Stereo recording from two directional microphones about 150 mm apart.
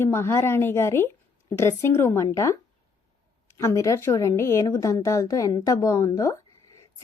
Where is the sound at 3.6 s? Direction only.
20° left (ahead or behind).